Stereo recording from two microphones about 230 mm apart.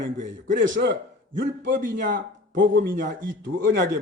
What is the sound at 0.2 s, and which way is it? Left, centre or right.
A man's voice, right.